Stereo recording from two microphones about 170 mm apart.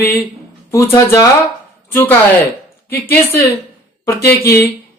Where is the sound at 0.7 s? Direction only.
15° left (ahead or behind).